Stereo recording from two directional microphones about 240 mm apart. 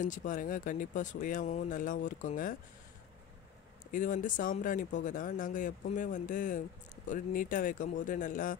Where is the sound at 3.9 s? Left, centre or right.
Left.